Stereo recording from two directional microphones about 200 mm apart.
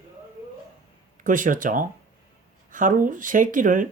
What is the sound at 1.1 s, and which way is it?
Speech, 40° right (ahead or behind).